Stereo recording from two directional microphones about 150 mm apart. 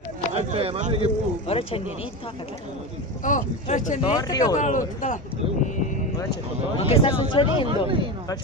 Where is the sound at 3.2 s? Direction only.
55° left (ahead or behind).